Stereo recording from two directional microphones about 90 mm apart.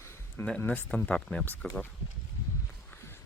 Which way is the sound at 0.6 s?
25° left (ahead or behind).